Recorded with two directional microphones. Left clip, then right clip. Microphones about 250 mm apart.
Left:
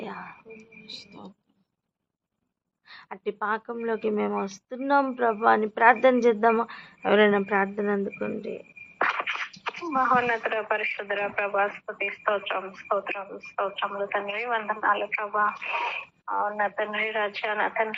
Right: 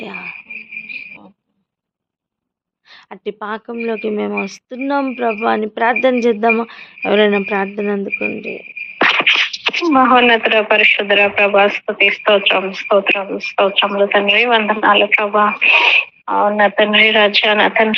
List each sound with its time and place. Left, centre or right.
0.0 s cricket: right
0.9 s cricket: left
2.9 s speech: right
9.0 s speech: right